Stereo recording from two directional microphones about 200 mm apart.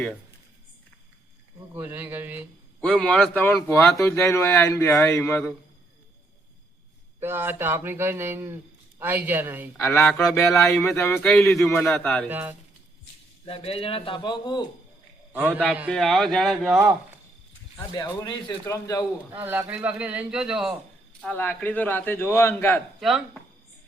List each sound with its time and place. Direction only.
1.7 s a man's voice: 10° right (ahead or behind)
2.8 s speech: 5° left (ahead or behind)
7.2 s a man's voice: 10° right (ahead or behind)
9.8 s a man's voice: 15° left (ahead or behind)
12.3 s a man's voice: 10° right (ahead or behind)
13.4 s a man's voice: 30° left (ahead or behind)
15.3 s a man's voice: 10° right (ahead or behind)
17.7 s speech: 20° left (ahead or behind)
19.3 s a man's voice: 10° right (ahead or behind)
21.2 s speech: 10° left (ahead or behind)
23.0 s a man's voice: centre (ahead or behind)